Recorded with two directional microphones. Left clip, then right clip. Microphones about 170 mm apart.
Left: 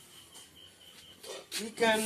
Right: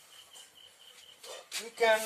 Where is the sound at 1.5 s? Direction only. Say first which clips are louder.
Right 1 dB; 25° right (ahead or behind).